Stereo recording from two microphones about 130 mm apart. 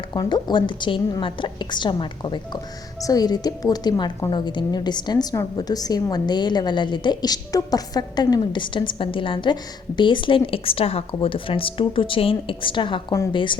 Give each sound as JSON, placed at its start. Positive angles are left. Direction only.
{"t": 0.1, "sound": "a woman's voice", "side_deg": 35}